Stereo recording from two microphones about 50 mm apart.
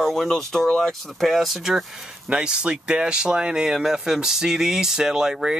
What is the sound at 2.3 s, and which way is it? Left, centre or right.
Speech, centre.